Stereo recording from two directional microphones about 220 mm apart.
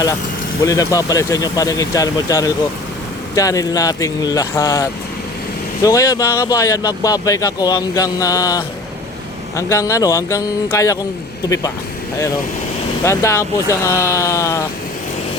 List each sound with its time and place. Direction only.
0.6 s speech: 15° left (ahead or behind)
13.1 s speech: 10° left (ahead or behind)